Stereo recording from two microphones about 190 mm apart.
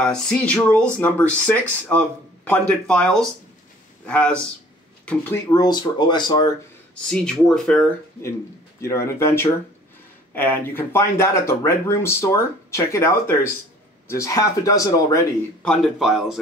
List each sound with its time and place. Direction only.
0.0 s speech: 5° left (ahead or behind); by 6.5 s 20° left (ahead or behind)
7.1 s a man's voice: 5° left (ahead or behind)
8.8 s speech: 15° left (ahead or behind)
15.6 s a man's voice: 5° left (ahead or behind)